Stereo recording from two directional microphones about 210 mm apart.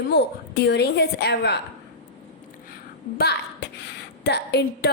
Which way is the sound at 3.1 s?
50° left (ahead or behind).